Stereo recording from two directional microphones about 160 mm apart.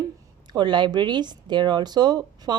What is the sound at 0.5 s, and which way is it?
Speech, 30° right (ahead or behind).